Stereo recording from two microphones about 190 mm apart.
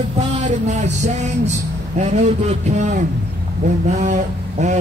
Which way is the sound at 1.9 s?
35° right (ahead or behind).